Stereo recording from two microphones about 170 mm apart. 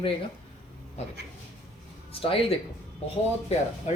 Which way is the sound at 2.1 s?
35° left (ahead or behind).